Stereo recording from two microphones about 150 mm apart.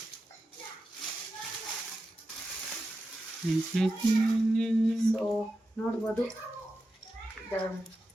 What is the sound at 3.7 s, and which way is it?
Speech, centre (ahead or behind).